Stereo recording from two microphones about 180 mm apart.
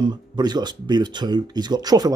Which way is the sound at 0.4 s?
25° right (ahead or behind).